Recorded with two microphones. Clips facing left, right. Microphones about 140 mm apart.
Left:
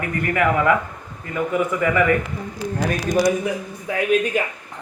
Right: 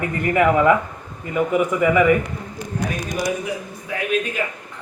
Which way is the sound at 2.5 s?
35° left (ahead or behind).